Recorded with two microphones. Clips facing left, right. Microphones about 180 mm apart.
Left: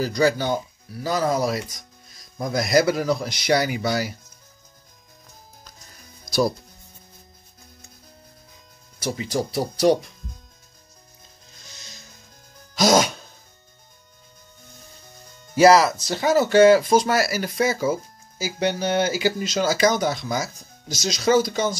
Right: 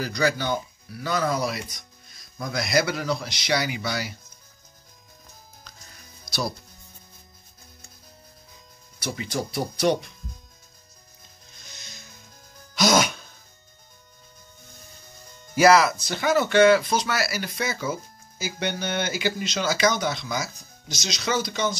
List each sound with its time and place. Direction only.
0.0 s speech: 40° left (ahead or behind)
6.2 s music: 45° left (ahead or behind)
9.0 s speech: 35° left (ahead or behind)
11.7 s rub: 35° left (ahead or behind)
12.7 s music: 35° left (ahead or behind)
15.5 s speech: 30° left (ahead or behind); by 21.7 s 50° left (ahead or behind)